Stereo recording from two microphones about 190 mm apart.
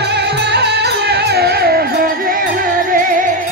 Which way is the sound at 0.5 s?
60° right (ahead or behind).